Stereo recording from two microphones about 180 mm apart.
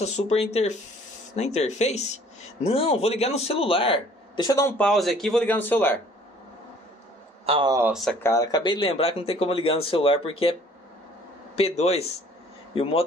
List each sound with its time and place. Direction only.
0.0 s speech: 40° left (ahead or behind); by 5.9 s 10° left (ahead or behind)
7.4 s speech: 30° right (ahead or behind)
7.9 s speech: centre (ahead or behind)
8.2 s speech: 15° left (ahead or behind)
11.5 s speech: 35° left (ahead or behind)